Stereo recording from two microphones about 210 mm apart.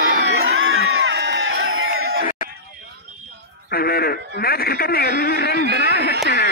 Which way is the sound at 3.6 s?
45° left (ahead or behind).